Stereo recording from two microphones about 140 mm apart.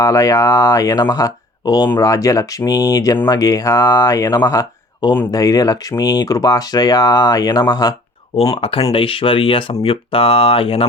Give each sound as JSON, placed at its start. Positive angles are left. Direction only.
{"t": 0.0, "sound": "speech", "side_deg": 25}
{"t": 8.3, "sound": "speech", "side_deg": 40}